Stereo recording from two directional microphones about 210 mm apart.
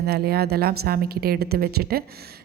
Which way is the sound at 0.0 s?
50° right (ahead or behind).